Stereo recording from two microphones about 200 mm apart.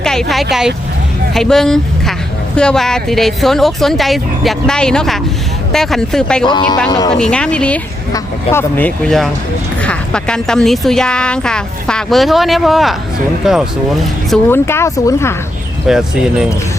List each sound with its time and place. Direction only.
0.0 s speech: centre (ahead or behind)
6.5 s speech: 20° left (ahead or behind)
7.1 s speech: 5° left (ahead or behind)
14.4 s speech: 10° left (ahead or behind)
15.9 s speech: 5° right (ahead or behind)